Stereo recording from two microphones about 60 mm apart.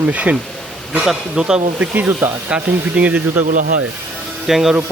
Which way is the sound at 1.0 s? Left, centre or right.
Centre.